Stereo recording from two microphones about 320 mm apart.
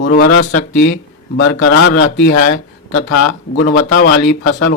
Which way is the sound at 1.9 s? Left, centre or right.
Left.